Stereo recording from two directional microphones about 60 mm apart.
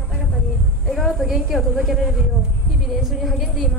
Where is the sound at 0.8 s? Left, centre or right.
Centre.